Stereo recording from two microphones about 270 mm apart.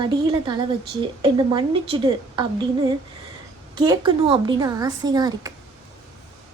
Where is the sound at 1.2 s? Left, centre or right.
Centre.